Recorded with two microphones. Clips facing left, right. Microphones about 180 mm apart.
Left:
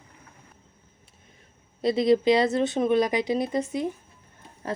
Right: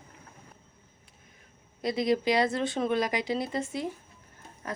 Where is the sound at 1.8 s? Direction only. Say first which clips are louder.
Left 6 dB; 25° left (ahead or behind).